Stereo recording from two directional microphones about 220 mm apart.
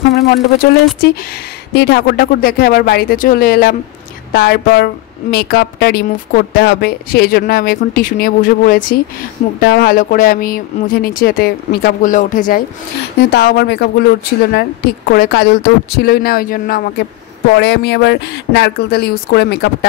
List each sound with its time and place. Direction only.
1.7 s a woman's voice: 50° left (ahead or behind)